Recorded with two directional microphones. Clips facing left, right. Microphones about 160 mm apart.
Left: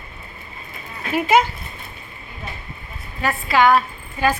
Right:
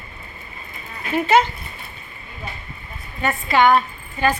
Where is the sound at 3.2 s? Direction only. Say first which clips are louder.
Even; centre (ahead or behind).